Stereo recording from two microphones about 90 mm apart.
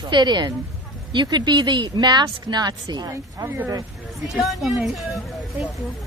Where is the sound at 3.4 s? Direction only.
25° right (ahead or behind).